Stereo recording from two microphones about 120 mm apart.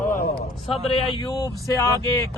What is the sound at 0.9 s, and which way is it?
Speech, 50° left (ahead or behind).